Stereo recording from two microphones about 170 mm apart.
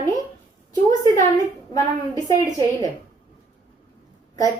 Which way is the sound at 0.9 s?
20° left (ahead or behind).